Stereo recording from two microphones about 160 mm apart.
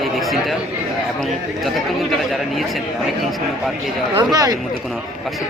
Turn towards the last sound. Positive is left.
turn(degrees=-20)  # may be behind; listen again after turning